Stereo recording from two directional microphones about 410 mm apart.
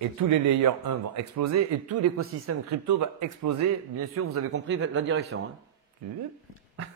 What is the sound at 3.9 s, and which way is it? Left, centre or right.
Speech, right.